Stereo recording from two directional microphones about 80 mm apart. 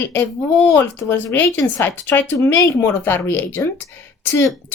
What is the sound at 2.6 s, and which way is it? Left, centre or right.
A woman's voice, left.